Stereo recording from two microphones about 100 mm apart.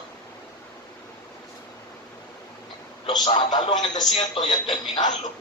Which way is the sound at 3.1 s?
50° left (ahead or behind).